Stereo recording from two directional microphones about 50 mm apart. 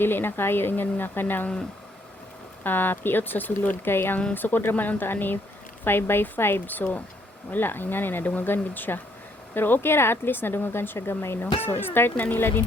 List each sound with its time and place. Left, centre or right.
0.0 s speech: left
2.6 s speech: left
8.2 s speech: left